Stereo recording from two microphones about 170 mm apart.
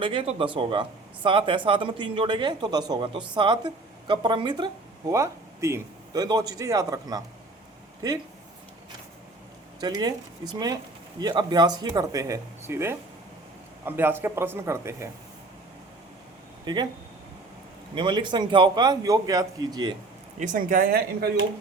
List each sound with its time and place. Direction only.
0.0 s speech: 30° right (ahead or behind)
9.8 s speech: 25° right (ahead or behind)
16.7 s speech: 25° right (ahead or behind)
17.9 s speech: 30° right (ahead or behind)
20.4 s speech: 50° right (ahead or behind); by 21.4 s 65° right (ahead or behind)